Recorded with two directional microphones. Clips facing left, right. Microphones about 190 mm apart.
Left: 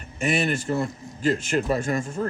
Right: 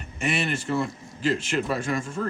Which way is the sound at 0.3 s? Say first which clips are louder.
Left 3 dB; 40° left (ahead or behind).